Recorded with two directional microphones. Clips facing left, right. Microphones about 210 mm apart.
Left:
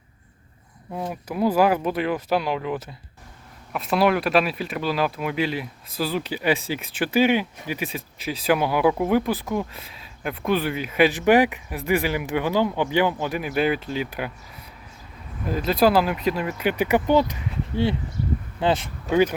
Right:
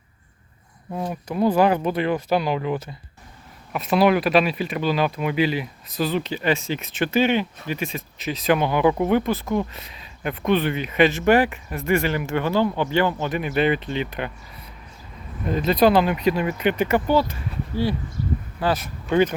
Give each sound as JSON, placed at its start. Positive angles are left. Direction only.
{"t": 0.9, "sound": "speech", "side_deg": 5}
{"t": 15.4, "sound": "speech", "side_deg": 5}